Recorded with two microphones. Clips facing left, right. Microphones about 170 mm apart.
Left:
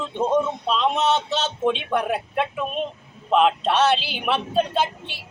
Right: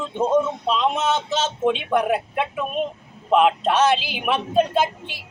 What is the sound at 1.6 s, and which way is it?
Speech, 10° right (ahead or behind).